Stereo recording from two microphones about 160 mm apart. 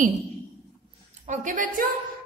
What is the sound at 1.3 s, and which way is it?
Speech, 55° right (ahead or behind).